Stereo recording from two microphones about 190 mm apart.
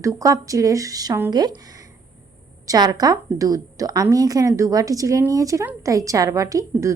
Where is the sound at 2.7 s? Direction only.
20° right (ahead or behind).